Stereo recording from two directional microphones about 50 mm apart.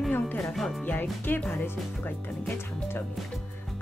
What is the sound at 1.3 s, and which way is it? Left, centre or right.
Speech, left.